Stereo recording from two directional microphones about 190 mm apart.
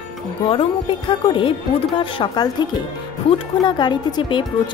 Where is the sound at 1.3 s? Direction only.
25° left (ahead or behind).